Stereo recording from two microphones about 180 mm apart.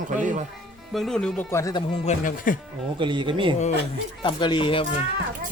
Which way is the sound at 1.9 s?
45° left (ahead or behind).